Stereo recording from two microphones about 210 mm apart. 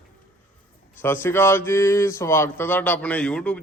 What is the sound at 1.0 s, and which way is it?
Speech, 10° left (ahead or behind).